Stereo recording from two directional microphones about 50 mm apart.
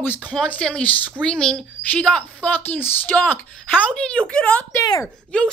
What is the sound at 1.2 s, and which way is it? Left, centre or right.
A child's voice, centre.